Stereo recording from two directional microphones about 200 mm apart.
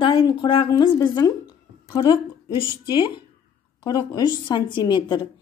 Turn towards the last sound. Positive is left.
turn(degrees=20)  # may be behind; listen again after turning